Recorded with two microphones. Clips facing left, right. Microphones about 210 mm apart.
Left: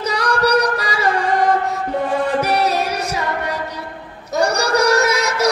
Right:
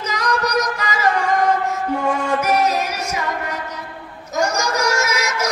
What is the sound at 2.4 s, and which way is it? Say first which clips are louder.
Music: even; 35° left (ahead or behind).